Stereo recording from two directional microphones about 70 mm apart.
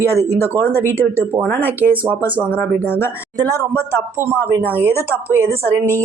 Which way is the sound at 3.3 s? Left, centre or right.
Right.